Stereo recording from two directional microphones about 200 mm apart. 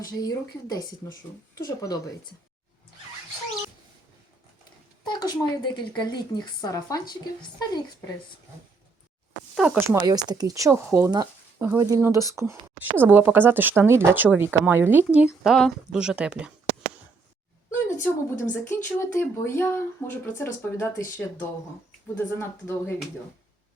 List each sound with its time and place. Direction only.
0.2 s a woman's voice: 20° left (ahead or behind)
5.0 s a woman's voice: 20° left (ahead or behind)
9.6 s speech: 5° right (ahead or behind)
17.8 s a woman's voice: 10° left (ahead or behind)